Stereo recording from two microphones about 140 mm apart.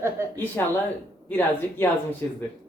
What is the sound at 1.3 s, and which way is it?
Speech, 15° left (ahead or behind).